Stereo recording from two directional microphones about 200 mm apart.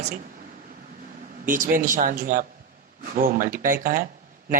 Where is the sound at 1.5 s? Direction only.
40° right (ahead or behind).